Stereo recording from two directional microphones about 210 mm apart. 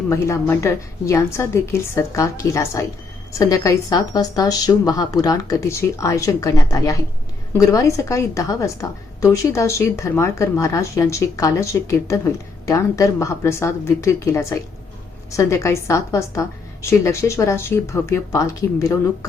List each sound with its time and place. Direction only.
0.1 s a woman's voice: 15° left (ahead or behind)